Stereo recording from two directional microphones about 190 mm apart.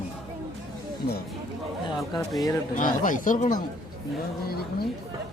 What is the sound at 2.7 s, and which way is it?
Speech, 45° left (ahead or behind).